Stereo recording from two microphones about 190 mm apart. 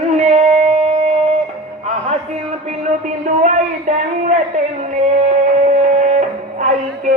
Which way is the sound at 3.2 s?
40° right (ahead or behind).